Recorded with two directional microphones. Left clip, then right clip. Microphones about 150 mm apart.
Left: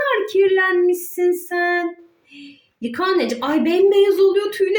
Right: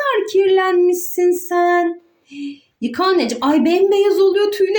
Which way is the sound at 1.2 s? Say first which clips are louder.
Right 5 dB; 30° right (ahead or behind).